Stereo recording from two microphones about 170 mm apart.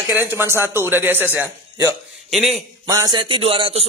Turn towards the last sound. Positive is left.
turn(degrees=-30)  # may be behind; listen again after turning